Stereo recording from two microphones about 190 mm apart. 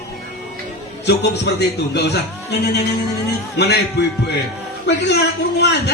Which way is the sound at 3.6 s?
60° left (ahead or behind).